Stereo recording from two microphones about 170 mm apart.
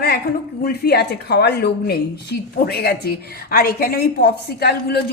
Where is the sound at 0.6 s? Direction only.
70° left (ahead or behind).